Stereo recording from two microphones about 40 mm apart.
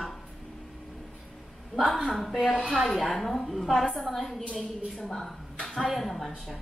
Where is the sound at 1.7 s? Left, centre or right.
Centre.